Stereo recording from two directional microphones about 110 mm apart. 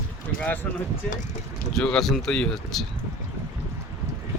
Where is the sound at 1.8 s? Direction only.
5° left (ahead or behind).